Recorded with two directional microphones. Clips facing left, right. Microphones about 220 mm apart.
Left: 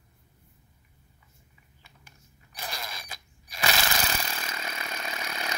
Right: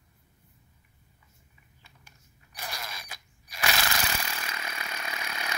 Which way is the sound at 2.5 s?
20° left (ahead or behind).